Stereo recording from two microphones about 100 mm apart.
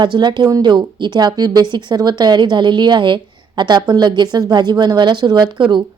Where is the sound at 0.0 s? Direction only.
50° right (ahead or behind).